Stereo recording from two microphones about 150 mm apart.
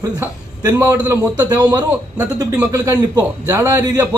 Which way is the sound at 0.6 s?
20° right (ahead or behind).